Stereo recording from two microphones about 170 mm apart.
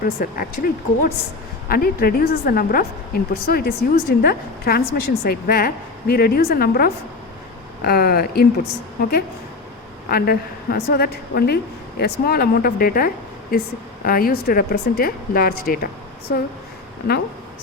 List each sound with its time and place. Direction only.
0.0 s a woman's voice: 60° left (ahead or behind)